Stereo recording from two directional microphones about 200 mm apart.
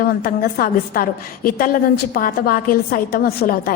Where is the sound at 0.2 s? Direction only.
45° left (ahead or behind).